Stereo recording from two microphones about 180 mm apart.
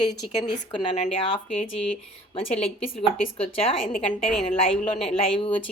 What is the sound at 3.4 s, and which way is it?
Speech, 30° left (ahead or behind).